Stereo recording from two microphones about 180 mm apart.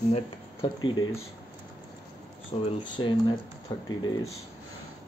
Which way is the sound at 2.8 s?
25° left (ahead or behind).